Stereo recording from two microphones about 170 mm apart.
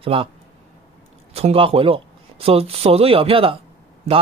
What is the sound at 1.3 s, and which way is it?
Speech, 35° right (ahead or behind).